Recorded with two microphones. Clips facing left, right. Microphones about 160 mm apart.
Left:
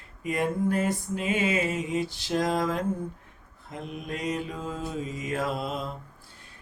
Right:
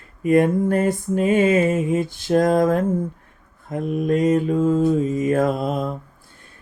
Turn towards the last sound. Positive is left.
turn(degrees=-50)  # may be behind; listen again after turning